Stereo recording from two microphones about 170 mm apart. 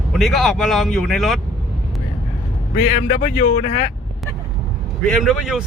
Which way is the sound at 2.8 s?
45° left (ahead or behind).